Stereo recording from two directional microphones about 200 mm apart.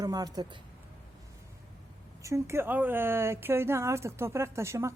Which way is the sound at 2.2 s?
15° right (ahead or behind).